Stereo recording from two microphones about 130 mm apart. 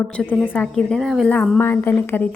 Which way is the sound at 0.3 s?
15° left (ahead or behind).